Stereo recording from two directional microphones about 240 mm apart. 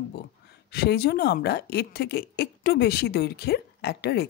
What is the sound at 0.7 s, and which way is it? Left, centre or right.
Speech, left.